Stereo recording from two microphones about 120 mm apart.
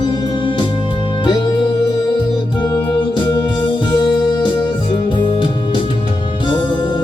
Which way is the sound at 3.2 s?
40° left (ahead or behind).